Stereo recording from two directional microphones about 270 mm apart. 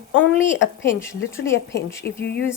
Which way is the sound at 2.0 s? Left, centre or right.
Left.